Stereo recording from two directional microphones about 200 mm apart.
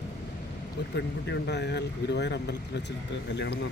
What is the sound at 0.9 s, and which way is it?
Speech, 60° left (ahead or behind).